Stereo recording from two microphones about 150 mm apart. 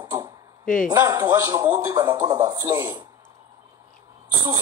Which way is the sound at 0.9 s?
25° right (ahead or behind).